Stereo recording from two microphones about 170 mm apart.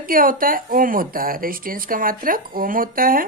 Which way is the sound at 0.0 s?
55° right (ahead or behind).